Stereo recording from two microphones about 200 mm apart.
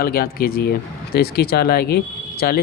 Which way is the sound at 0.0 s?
50° left (ahead or behind).